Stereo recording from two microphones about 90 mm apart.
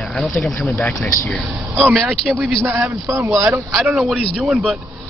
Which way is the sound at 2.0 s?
5° left (ahead or behind).